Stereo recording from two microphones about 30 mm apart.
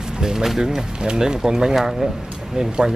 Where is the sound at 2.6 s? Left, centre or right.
Right.